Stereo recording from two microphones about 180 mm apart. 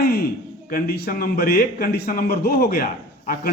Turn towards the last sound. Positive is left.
turn(degrees=55)  # may be behind; listen again after turning